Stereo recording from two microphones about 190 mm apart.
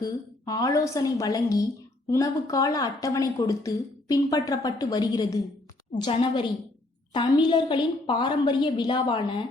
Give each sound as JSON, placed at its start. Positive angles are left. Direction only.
{"t": 0.0, "sound": "a woman's voice", "side_deg": 20}